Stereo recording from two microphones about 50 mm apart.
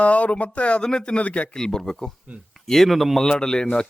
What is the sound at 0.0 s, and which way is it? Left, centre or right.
Speech, left.